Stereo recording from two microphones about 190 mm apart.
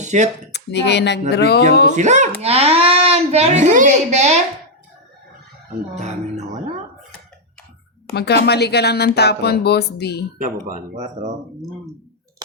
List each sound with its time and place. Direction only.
0.0 s a sound: 40° right (ahead or behind)
0.5 s speech: 65° left (ahead or behind)
2.0 s a child's voice: 40° right (ahead or behind)
6.0 s speech: 40° right (ahead or behind)
8.1 s speech: 60° left (ahead or behind)
10.3 s speech: 45° right (ahead or behind)